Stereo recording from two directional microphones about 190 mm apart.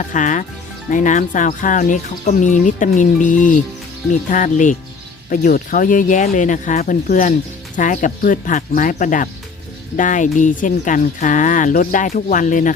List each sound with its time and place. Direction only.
0.0 s speech: 40° left (ahead or behind)